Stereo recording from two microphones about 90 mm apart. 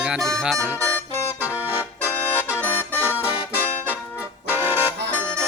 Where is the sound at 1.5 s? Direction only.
20° right (ahead or behind).